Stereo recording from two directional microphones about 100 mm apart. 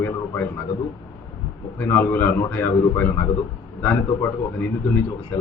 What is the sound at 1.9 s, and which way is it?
A man's voice, 20° left (ahead or behind).